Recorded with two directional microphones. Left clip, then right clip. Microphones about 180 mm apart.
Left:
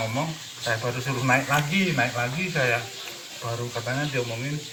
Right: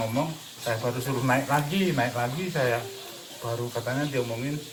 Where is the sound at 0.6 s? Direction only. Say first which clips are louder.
Left 2 dB; 20° right (ahead or behind).